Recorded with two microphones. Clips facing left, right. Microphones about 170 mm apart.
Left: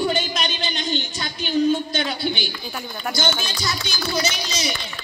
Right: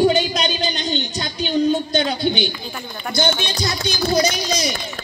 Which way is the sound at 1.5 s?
40° right (ahead or behind).